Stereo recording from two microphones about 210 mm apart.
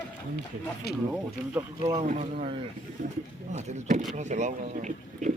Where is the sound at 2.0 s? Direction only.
35° right (ahead or behind).